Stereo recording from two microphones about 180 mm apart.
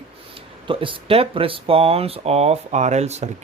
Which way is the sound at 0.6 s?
30° right (ahead or behind).